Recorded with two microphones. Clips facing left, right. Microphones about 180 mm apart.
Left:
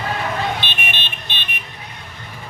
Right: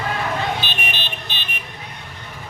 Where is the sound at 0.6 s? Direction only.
40° right (ahead or behind).